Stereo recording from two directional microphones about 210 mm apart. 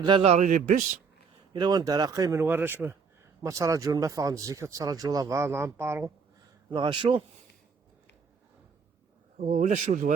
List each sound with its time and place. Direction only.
0.0 s a man's voice: 25° right (ahead or behind)
1.5 s a man's voice: 20° right (ahead or behind)
9.4 s a man's voice: 35° right (ahead or behind)